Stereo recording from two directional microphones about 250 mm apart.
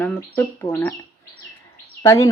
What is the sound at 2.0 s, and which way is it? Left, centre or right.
Speech, centre.